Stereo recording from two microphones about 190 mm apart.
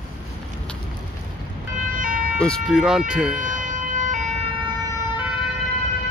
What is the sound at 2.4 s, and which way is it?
Speech, centre (ahead or behind).